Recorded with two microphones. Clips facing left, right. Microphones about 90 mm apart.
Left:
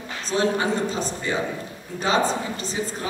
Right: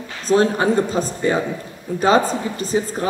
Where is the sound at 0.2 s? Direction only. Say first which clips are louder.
Right 6 dB; 45° right (ahead or behind).